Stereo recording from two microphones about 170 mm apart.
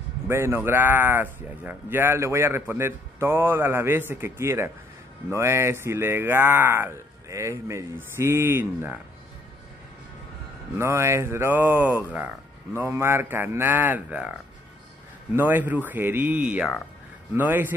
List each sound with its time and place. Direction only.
0.3 s speech: 15° right (ahead or behind)
10.8 s speech: 15° right (ahead or behind)
15.3 s speech: 10° right (ahead or behind)